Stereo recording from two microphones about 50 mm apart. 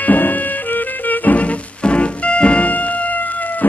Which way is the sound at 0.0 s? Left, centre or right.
Left.